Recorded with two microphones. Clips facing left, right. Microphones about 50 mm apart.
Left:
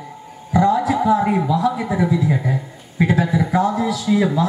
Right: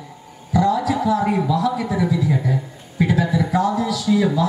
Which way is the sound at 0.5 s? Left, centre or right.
Left.